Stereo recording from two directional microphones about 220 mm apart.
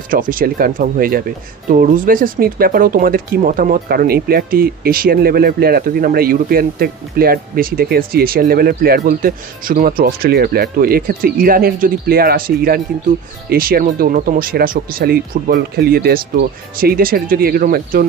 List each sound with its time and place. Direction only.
0.1 s speech: 40° right (ahead or behind)